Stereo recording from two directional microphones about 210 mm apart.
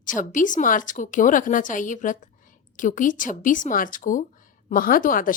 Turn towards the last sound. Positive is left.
turn(degrees=40)  # may be behind; listen again after turning